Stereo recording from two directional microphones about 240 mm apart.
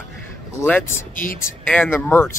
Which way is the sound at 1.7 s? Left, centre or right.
Centre.